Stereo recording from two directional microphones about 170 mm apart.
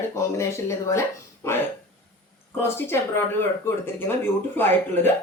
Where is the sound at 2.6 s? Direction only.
15° left (ahead or behind).